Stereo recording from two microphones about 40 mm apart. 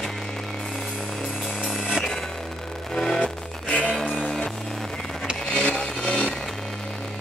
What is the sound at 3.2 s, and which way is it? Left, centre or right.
Music, left.